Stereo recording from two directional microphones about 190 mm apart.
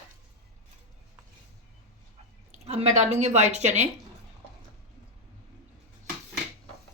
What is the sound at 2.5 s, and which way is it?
A woman's voice, 35° right (ahead or behind).